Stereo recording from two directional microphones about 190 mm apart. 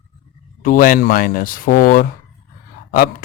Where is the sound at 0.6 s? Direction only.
45° left (ahead or behind).